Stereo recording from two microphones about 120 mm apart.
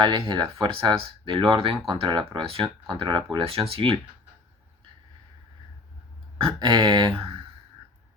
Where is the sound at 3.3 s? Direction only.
50° right (ahead or behind).